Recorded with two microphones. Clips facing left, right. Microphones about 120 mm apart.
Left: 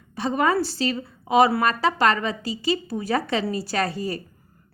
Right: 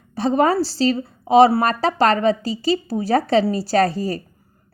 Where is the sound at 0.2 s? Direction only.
35° right (ahead or behind).